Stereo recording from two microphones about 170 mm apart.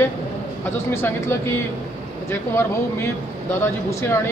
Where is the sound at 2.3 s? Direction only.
15° left (ahead or behind).